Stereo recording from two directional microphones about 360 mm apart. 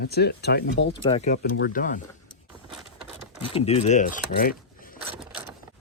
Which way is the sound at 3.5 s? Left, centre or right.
Centre.